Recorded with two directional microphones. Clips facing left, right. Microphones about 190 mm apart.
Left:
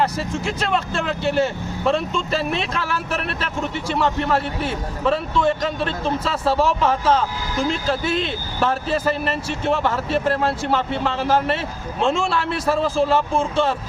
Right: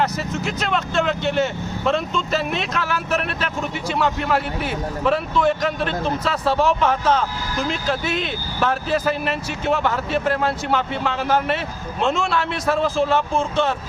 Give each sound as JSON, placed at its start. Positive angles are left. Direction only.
{"t": 0.7, "sound": "speech", "side_deg": 0}
{"t": 8.0, "sound": "speech", "side_deg": 30}
{"t": 8.6, "sound": "speech", "side_deg": -5}